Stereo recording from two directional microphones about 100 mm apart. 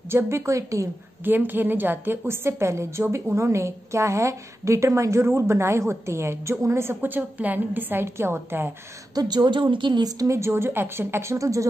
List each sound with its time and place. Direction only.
0.1 s a woman's voice: 25° right (ahead or behind)
1.2 s a woman's voice: 20° right (ahead or behind)
9.1 s a woman's voice: 40° right (ahead or behind)